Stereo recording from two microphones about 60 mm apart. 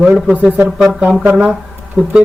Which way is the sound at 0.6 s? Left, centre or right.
Centre.